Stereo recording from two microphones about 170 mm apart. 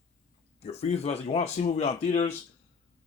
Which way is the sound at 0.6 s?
40° left (ahead or behind).